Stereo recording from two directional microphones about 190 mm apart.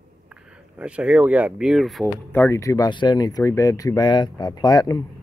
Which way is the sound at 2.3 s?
10° left (ahead or behind).